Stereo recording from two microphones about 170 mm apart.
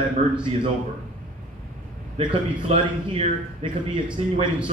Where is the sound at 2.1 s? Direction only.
35° right (ahead or behind).